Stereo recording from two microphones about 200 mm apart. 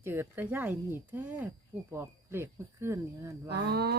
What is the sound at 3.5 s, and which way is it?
Speech, 55° right (ahead or behind).